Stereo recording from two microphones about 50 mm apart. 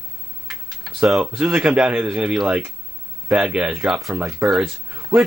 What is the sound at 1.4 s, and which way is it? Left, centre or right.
Speech, right.